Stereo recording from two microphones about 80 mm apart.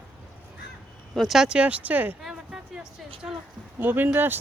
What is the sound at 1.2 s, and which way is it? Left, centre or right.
Speech, centre.